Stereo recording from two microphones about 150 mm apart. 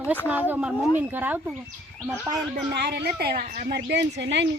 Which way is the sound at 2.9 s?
90° right.